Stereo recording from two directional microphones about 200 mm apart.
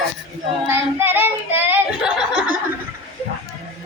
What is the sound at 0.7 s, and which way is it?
Child singing, 10° right (ahead or behind).